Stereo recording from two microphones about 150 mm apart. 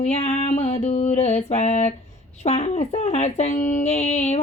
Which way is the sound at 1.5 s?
50° left (ahead or behind).